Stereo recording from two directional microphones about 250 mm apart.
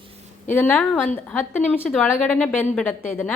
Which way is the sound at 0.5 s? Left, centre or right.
Centre.